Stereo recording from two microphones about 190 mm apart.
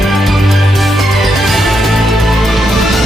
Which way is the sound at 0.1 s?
Centre (ahead or behind).